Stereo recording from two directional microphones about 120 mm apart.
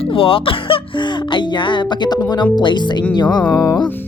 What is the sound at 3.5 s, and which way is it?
Music, 30° left (ahead or behind).